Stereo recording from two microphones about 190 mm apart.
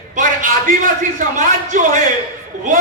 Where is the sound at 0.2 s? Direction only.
45° right (ahead or behind).